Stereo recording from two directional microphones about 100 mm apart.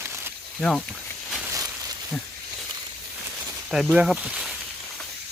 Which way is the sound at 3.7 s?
5° right (ahead or behind).